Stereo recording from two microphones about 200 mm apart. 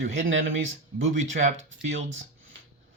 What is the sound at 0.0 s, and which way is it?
Speech, 70° right (ahead or behind).